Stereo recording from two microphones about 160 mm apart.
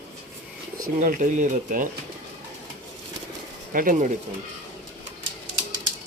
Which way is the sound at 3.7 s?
60° right (ahead or behind).